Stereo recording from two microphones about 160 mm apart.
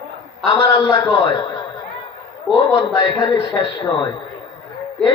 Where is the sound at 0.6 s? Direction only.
20° left (ahead or behind).